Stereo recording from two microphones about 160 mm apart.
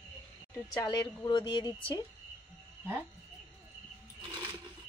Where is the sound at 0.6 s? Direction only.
25° left (ahead or behind).